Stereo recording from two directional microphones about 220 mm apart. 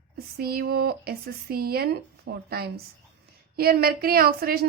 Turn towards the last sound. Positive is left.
turn(degrees=-45)  # may be behind; listen again after turning